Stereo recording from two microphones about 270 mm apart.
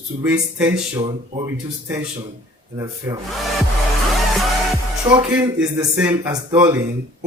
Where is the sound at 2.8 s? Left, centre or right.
Centre.